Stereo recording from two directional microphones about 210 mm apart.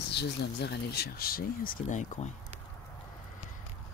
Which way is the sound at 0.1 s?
55° left (ahead or behind).